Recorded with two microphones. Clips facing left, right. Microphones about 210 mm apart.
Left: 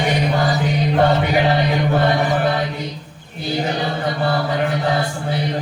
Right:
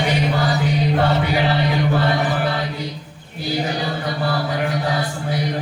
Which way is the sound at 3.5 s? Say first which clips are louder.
Left 1 dB; 25° left (ahead or behind).